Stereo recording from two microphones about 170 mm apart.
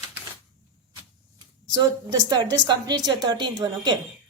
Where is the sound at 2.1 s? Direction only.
25° right (ahead or behind).